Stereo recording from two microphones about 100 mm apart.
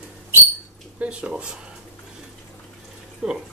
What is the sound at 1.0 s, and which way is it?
Speech, 10° right (ahead or behind).